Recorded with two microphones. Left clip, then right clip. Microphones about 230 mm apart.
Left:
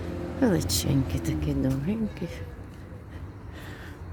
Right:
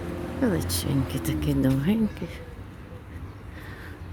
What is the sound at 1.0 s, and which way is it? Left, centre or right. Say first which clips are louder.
Speech: right 2 dB; centre.